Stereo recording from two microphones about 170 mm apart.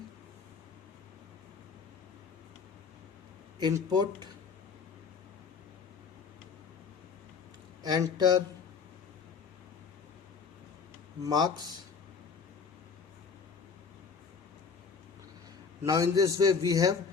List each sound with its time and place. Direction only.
3.6 s a man's voice: 25° right (ahead or behind)
7.8 s a man's voice: 20° right (ahead or behind)
11.2 s a man's voice: 25° right (ahead or behind)
15.8 s a man's voice: 20° right (ahead or behind)